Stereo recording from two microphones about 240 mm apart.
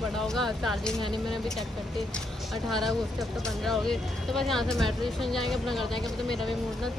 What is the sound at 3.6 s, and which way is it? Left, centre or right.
Speech, centre.